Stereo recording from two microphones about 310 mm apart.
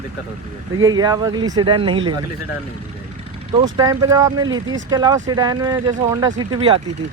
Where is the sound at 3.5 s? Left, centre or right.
Centre.